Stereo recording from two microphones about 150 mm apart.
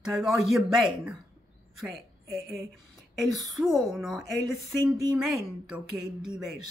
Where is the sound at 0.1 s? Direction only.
5° right (ahead or behind).